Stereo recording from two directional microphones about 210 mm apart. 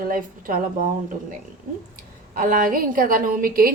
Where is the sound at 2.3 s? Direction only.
40° right (ahead or behind).